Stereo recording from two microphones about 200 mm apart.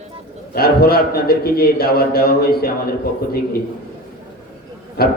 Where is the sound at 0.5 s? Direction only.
50° left (ahead or behind).